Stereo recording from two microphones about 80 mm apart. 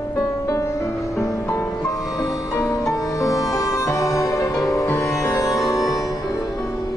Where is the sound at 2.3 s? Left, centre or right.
Left.